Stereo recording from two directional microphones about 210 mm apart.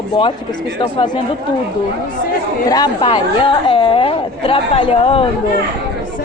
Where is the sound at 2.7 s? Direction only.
20° left (ahead or behind).